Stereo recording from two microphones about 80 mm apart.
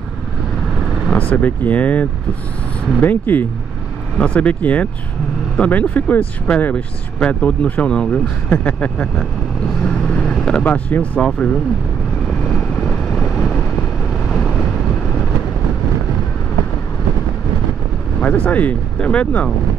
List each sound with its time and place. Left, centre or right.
1.1 s speech: centre
9.8 s vehicle: centre
10.6 s speech: centre
12.5 s vehicle: centre
18.2 s speech: centre